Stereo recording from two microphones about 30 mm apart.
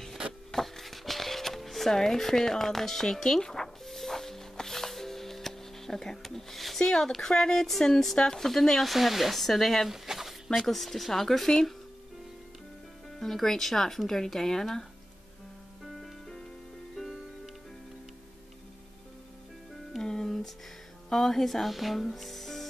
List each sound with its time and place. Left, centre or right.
0.5 s music: centre
1.9 s speech: centre
3.8 s music: centre
6.8 s speech: centre
8.9 s speech: centre
9.4 s speech: centre
9.8 s a sound: centre
10.6 s speech: centre
13.2 s speech: centre
15.8 s music: centre
20.0 s music: centre
21.1 s speech: centre
21.6 s speech: centre